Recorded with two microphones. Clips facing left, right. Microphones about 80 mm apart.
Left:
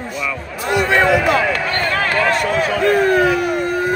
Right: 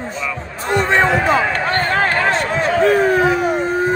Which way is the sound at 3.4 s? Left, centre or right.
Right.